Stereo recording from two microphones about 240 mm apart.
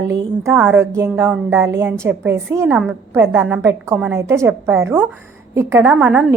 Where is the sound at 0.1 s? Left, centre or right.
Centre.